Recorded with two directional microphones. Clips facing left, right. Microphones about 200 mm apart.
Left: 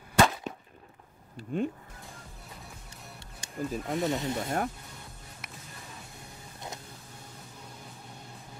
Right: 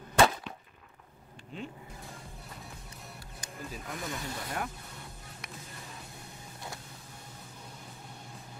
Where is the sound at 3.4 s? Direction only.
25° left (ahead or behind).